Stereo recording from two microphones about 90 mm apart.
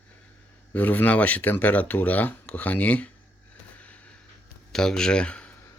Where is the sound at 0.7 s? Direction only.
20° left (ahead or behind).